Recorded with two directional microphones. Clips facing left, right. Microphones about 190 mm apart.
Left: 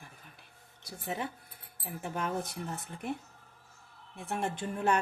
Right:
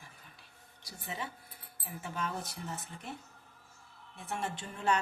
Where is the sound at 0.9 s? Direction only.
55° left (ahead or behind).